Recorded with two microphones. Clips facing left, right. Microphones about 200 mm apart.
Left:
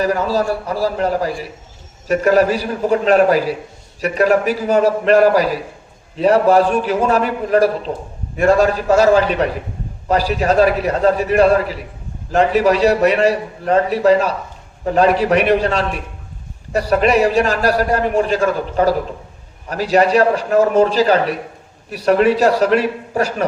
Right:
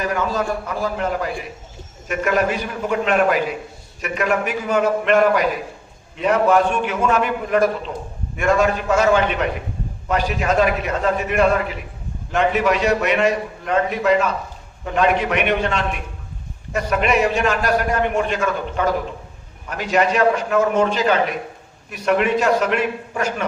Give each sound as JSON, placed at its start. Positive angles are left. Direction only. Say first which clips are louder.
{"t": 0.0, "sound": "a man's voice", "louder": "left 5 dB", "side_deg": 35}